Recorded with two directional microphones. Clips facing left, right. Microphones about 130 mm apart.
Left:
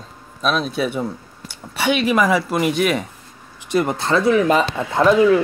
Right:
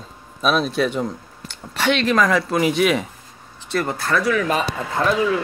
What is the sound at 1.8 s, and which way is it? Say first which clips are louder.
Speech: left 1 dB; 10° left (ahead or behind).